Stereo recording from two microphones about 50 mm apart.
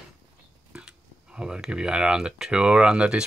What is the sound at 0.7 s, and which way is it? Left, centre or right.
Speech, centre.